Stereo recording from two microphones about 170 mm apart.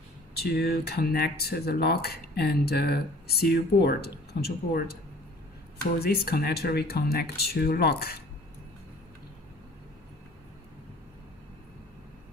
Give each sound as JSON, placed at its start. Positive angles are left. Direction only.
{"t": 0.4, "sound": "speech", "side_deg": 70}
{"t": 5.9, "sound": "speech", "side_deg": 70}